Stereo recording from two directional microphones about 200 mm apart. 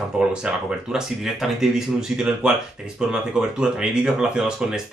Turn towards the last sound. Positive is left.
turn(degrees=-5)  # may be behind; listen again after turning